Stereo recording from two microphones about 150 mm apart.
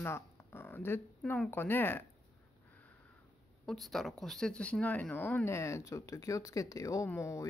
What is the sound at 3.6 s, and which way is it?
Speech, centre (ahead or behind).